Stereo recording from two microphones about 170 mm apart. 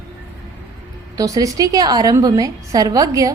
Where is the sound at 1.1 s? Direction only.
20° right (ahead or behind).